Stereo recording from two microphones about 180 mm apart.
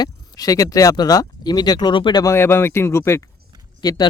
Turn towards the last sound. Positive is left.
turn(degrees=20)  # may be behind; listen again after turning